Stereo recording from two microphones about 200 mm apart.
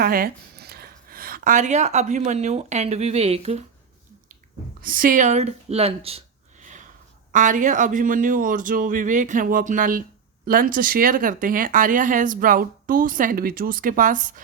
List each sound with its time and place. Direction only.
0.0 s speech: 45° right (ahead or behind); by 3.6 s 30° right (ahead or behind)
4.8 s speech: 45° right (ahead or behind)